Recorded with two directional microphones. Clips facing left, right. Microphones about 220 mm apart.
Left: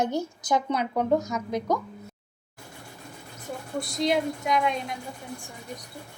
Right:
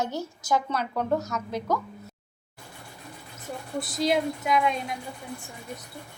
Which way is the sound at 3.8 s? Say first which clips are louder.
Even; 5° right (ahead or behind).